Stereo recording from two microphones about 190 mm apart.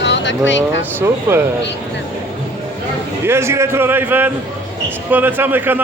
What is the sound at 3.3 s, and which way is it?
A man's voice, 15° right (ahead or behind).